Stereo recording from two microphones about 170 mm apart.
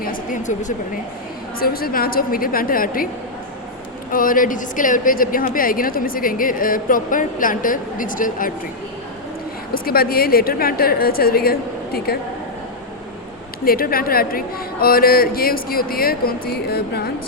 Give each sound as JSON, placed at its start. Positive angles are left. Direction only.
{"t": 0.0, "sound": "a sound", "side_deg": 55}
{"t": 1.5, "sound": "speech", "side_deg": 60}
{"t": 4.1, "sound": "a woman's voice", "side_deg": 55}
{"t": 9.7, "sound": "speech", "side_deg": 60}
{"t": 13.7, "sound": "speech", "side_deg": 60}